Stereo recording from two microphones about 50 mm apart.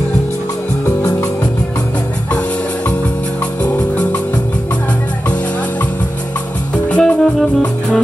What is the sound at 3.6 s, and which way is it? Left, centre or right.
Music, left.